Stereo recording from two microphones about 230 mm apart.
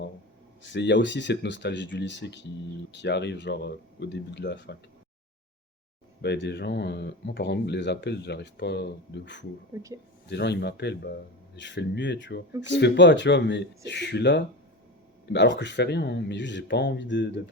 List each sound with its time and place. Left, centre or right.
0.6 s speech: left
6.2 s speech: left